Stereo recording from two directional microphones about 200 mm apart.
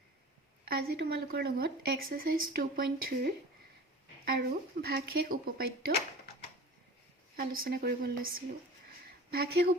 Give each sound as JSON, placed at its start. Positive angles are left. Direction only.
{"t": 0.6, "sound": "speech", "side_deg": -50}
{"t": 7.3, "sound": "speech", "side_deg": -45}
{"t": 9.3, "sound": "speech", "side_deg": -50}